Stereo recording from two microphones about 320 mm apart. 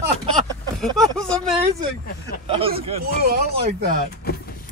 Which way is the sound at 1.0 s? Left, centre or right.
Centre.